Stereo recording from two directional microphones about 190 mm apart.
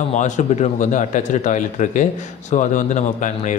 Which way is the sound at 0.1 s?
40° left (ahead or behind).